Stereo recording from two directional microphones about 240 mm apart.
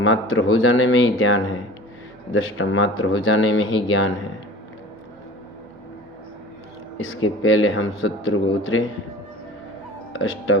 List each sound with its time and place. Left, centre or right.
0.0 s speech: left
7.0 s speech: left
10.1 s speech: left